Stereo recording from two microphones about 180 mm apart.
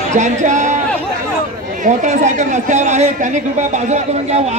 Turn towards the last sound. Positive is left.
turn(degrees=-40)  # may be behind; listen again after turning